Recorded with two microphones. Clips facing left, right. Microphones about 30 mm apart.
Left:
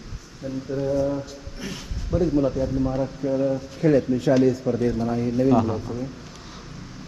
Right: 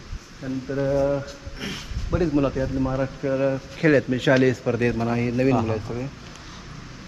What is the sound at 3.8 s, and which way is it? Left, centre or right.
A man's voice, right.